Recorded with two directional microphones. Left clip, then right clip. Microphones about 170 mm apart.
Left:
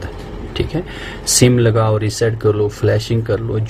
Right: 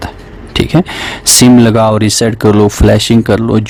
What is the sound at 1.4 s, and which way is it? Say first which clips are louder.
Speech: right 7 dB; 90° right.